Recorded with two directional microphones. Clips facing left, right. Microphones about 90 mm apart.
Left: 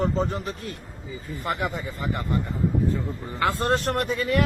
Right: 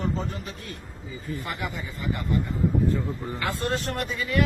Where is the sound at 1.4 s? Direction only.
40° left (ahead or behind).